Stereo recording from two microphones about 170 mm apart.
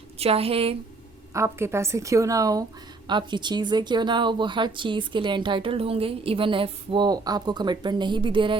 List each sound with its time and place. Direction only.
0.2 s a woman's voice: 35° right (ahead or behind)
1.3 s a woman's voice: 15° right (ahead or behind)